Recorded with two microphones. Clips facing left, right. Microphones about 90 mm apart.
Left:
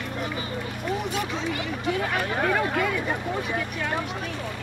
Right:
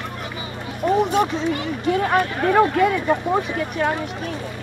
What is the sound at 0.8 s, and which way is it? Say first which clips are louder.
Speech: right 11 dB; 50° right (ahead or behind).